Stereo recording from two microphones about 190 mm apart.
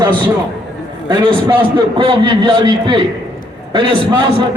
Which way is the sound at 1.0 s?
25° right (ahead or behind).